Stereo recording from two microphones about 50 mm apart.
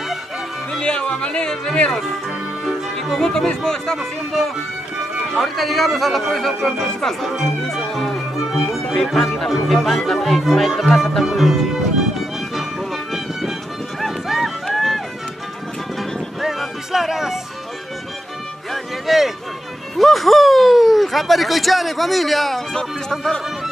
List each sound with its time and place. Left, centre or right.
0.7 s speech: centre
2.6 s speech: centre
5.4 s a man's voice: centre
12.2 s music: centre
14.0 s run: centre
16.0 s music: centre
18.7 s music: centre
20.0 s speech: centre